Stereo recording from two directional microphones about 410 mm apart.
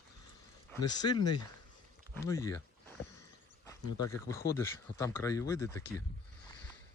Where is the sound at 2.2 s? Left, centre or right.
Centre.